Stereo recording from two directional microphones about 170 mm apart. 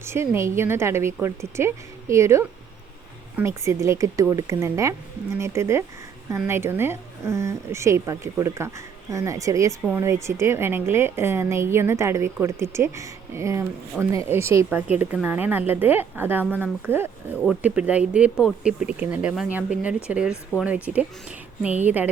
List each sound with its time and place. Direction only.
0.0 s a woman's voice: 15° right (ahead or behind)